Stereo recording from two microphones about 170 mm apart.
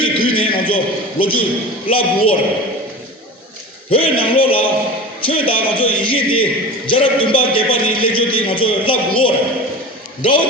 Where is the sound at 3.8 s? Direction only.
30° left (ahead or behind).